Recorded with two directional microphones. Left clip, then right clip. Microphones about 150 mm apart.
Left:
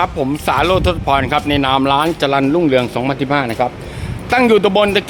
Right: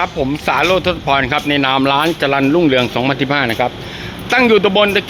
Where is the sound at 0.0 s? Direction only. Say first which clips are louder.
Even; 20° left (ahead or behind).